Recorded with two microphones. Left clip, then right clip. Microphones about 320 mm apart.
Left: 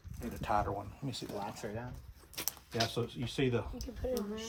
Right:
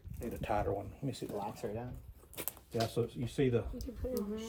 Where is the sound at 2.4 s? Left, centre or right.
Centre.